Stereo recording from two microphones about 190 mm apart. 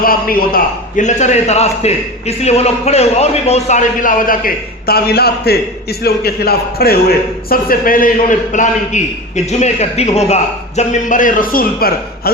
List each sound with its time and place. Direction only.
0.0 s a man's voice: 50° left (ahead or behind)